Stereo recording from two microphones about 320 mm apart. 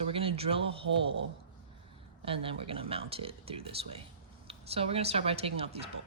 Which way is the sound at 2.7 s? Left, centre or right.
Centre.